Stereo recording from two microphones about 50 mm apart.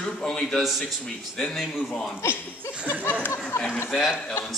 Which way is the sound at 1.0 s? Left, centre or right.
Centre.